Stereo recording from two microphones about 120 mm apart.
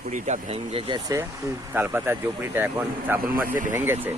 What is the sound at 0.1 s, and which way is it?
Speech, 65° right (ahead or behind).